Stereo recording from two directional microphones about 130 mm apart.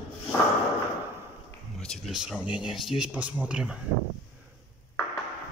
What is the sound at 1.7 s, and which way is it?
Speech, 5° left (ahead or behind).